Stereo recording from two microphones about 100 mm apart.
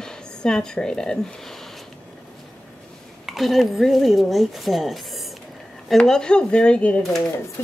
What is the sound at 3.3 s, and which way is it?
A woman's voice, centre (ahead or behind).